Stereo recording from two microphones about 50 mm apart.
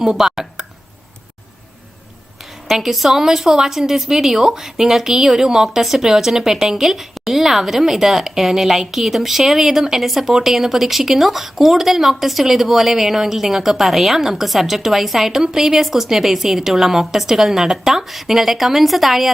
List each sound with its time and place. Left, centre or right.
0.0 s speech: centre
2.6 s a woman's voice: centre